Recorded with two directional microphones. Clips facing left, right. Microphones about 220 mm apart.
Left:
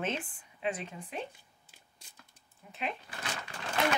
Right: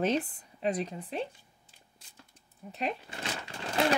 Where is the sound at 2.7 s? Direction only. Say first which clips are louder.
Right 4 dB; 40° right (ahead or behind).